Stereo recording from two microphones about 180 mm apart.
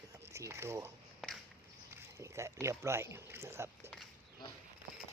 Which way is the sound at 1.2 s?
Centre (ahead or behind).